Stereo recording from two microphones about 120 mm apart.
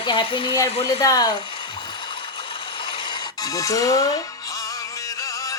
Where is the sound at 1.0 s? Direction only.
30° left (ahead or behind).